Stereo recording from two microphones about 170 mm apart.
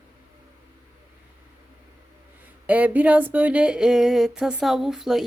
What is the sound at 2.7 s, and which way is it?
Speech, 10° right (ahead or behind).